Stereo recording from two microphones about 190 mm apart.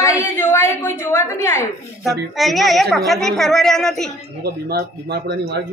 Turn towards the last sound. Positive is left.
turn(degrees=-60)  # may be behind; listen again after turning